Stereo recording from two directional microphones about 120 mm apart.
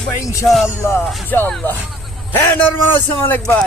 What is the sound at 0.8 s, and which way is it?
A man's voice, 20° left (ahead or behind).